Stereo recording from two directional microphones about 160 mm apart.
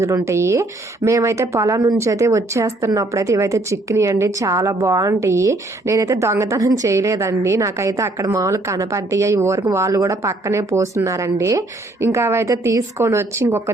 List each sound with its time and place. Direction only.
0.0 s speech: 15° right (ahead or behind)